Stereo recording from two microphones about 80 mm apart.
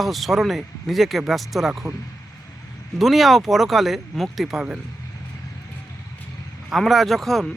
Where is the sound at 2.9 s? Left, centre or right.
Centre.